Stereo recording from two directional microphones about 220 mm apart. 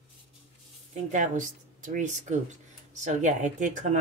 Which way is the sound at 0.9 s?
35° right (ahead or behind).